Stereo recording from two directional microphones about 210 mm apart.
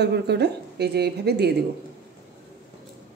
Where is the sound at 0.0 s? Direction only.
50° right (ahead or behind).